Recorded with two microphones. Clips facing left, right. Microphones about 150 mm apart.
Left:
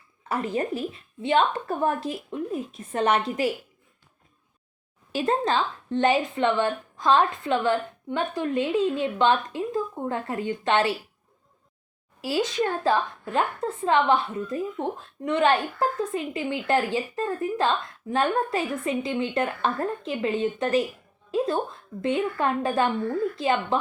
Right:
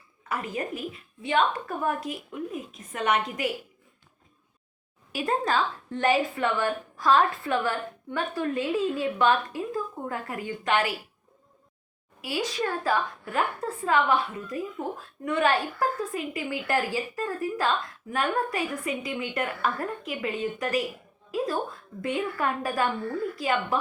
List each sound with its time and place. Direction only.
0.3 s a woman's voice: 30° left (ahead or behind)
5.1 s a woman's voice: 25° left (ahead or behind)
12.2 s a woman's voice: 25° left (ahead or behind)
21.2 s music: 25° left (ahead or behind)
22.0 s a woman's voice: 25° left (ahead or behind)